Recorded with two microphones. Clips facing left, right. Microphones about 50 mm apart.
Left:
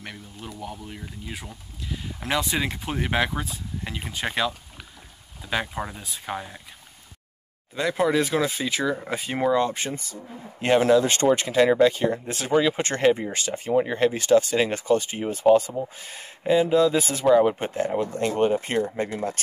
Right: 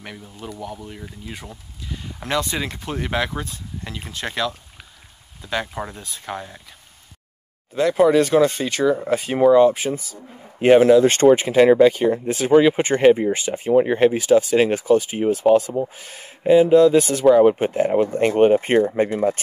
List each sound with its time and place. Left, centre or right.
0.0 s speech: centre
7.7 s speech: centre
10.6 s speech: centre
11.9 s speech: centre
12.5 s speech: centre
14.1 s speech: centre
17.3 s speech: centre
17.9 s speech: right